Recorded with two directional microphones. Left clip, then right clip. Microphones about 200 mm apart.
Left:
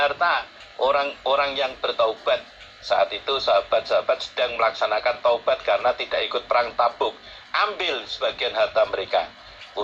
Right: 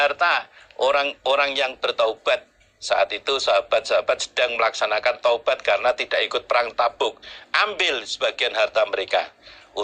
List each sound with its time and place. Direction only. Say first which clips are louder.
0.0 s a man's voice: right 1 dB; 35° right (ahead or behind)